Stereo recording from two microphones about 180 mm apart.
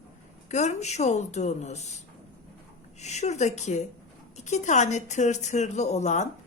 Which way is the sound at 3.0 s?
40° left (ahead or behind).